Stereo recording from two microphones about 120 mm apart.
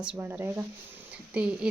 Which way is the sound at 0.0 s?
15° right (ahead or behind).